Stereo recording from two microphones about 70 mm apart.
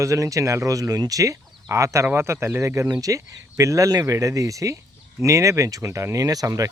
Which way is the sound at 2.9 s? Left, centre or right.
Right.